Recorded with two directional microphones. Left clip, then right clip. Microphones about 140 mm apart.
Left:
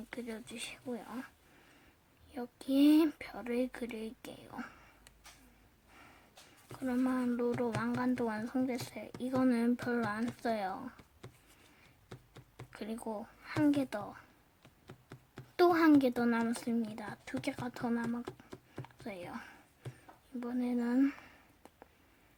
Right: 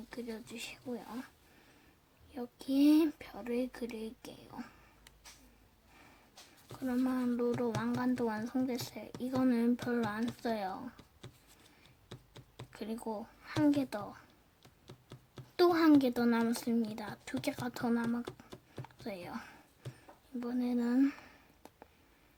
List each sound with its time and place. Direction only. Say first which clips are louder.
0.3 s speech: left 1 dB; 15° left (ahead or behind)
2.3 s speech: left 1 dB; 15° left (ahead or behind)
6.7 s speech: left 1 dB; 5° left (ahead or behind)
12.0 s a sound: right 1 dB; 5° left (ahead or behind)
14.8 s speech: left 1 dB; 5° left (ahead or behind)
20.4 s a sound: right 1 dB; 5° left (ahead or behind)